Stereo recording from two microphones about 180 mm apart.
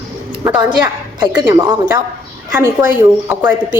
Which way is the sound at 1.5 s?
20° right (ahead or behind).